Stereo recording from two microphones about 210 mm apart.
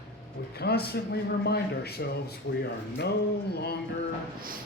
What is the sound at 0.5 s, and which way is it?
Speech, 50° left (ahead or behind).